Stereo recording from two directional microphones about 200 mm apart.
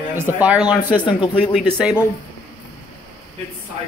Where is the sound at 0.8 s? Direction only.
25° left (ahead or behind).